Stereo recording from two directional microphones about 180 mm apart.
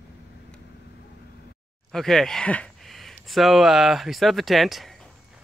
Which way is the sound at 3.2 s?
Centre (ahead or behind).